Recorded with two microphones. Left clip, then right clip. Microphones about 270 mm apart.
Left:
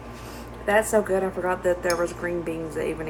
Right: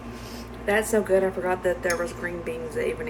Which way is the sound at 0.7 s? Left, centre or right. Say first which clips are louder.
Left 1 dB; centre.